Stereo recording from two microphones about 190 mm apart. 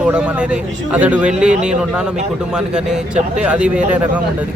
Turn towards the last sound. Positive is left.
turn(degrees=-5)  # may be behind; listen again after turning